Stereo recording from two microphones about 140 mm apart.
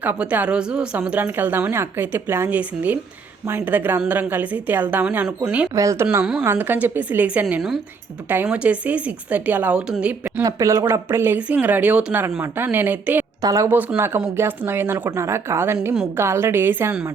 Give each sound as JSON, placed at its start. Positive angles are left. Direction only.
{"t": 0.0, "sound": "speech", "side_deg": -10}
{"t": 5.7, "sound": "speech", "side_deg": -20}
{"t": 10.4, "sound": "speech", "side_deg": -20}
{"t": 13.4, "sound": "speech", "side_deg": -25}